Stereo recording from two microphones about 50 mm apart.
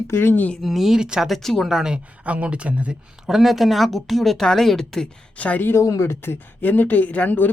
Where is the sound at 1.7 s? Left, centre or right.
Centre.